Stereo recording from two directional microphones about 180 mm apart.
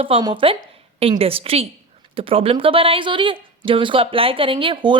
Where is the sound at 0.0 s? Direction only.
25° right (ahead or behind).